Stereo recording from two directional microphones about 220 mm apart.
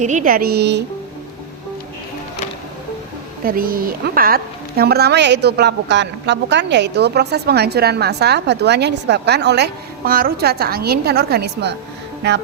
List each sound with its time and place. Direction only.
0.0 s a woman's voice: 35° right (ahead or behind); by 0.9 s 50° right (ahead or behind)
3.4 s a woman's voice: 40° right (ahead or behind)